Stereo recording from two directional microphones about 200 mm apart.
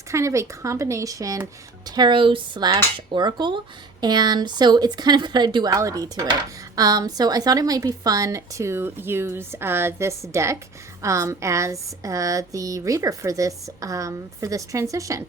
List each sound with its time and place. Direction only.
0.1 s speech: 15° right (ahead or behind)